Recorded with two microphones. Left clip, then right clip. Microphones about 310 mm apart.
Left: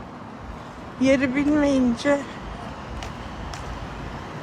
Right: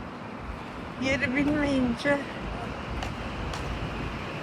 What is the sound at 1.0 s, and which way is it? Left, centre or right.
A woman's voice, centre.